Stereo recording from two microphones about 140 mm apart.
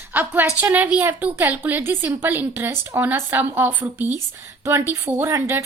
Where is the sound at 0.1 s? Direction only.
15° right (ahead or behind).